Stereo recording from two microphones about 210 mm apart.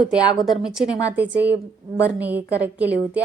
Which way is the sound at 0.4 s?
Centre (ahead or behind).